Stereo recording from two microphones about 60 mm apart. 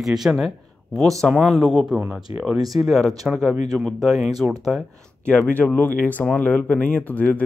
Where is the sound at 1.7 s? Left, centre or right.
Centre.